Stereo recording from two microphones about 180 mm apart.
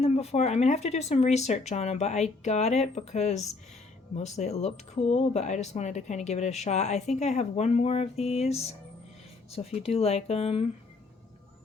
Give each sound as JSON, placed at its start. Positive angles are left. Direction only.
{"t": 0.0, "sound": "speech", "side_deg": 35}